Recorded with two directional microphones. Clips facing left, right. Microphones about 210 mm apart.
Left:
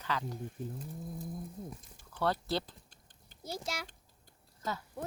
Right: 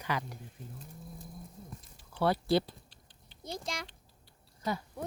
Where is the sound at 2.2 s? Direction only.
10° right (ahead or behind).